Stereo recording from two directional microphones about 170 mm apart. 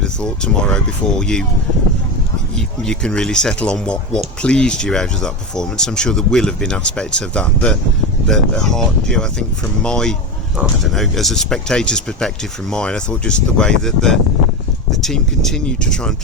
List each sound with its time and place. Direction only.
0.0 s speech: 5° left (ahead or behind)
2.6 s speech: 5° left (ahead or behind)